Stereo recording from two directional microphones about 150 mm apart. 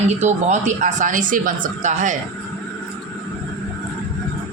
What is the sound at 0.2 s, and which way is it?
A woman's voice, 50° right (ahead or behind).